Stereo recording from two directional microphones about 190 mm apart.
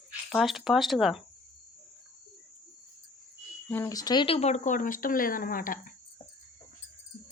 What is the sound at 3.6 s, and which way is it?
Speech, 15° left (ahead or behind).